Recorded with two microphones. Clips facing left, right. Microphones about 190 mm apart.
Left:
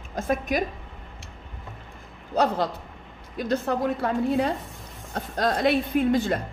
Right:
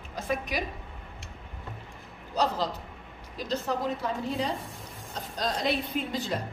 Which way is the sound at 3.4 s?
55° left (ahead or behind).